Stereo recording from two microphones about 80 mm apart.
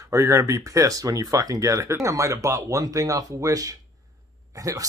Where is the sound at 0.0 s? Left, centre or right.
Right.